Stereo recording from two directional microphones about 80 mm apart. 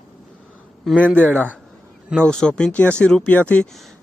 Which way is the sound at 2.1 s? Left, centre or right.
Centre.